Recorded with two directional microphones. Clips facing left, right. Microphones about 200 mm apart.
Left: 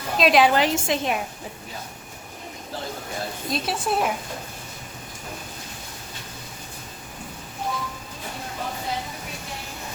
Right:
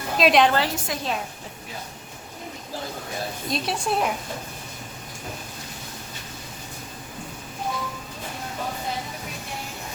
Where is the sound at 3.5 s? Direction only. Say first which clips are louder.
Left 1 dB; centre (ahead or behind).